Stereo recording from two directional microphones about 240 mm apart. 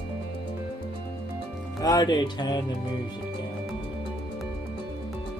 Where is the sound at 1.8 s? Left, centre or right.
Centre.